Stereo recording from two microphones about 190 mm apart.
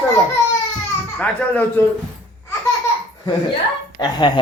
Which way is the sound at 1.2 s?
10° left (ahead or behind).